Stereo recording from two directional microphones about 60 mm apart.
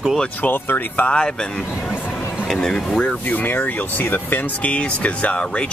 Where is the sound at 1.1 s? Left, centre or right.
Centre.